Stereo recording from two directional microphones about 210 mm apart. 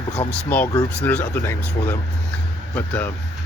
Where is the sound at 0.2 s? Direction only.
15° left (ahead or behind).